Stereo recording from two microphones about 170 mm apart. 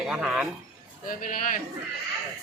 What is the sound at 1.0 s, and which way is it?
Speech, 55° left (ahead or behind).